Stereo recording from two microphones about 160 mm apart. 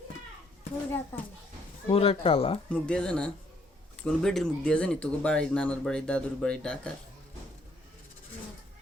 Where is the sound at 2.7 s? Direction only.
5° left (ahead or behind).